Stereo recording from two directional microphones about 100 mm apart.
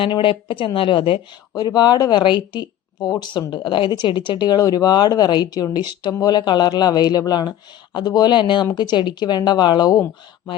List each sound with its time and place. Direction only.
0.0 s speech: 60° left (ahead or behind)
1.5 s speech: 45° left (ahead or behind)
3.5 s speech: 55° left (ahead or behind)